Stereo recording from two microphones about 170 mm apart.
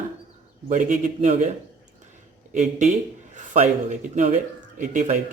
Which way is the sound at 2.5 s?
45° right (ahead or behind).